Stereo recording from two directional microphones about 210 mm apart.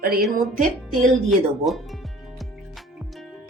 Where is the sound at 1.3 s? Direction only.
Centre (ahead or behind).